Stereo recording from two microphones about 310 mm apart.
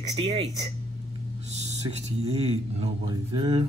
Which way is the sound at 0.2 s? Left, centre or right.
Right.